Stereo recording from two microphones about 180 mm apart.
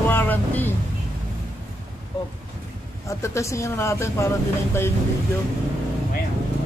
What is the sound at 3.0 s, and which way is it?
Speech, 15° left (ahead or behind).